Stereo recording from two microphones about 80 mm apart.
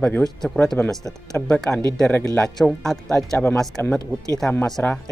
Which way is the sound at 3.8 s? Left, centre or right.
Left.